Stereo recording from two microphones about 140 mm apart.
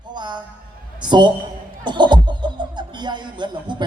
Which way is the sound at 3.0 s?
30° right (ahead or behind).